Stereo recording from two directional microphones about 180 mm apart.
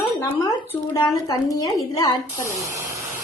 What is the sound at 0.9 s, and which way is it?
A woman's voice, 20° left (ahead or behind).